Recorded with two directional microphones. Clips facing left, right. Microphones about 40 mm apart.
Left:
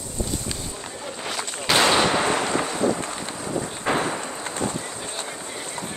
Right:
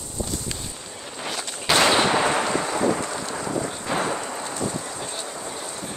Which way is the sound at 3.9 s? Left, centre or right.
Left.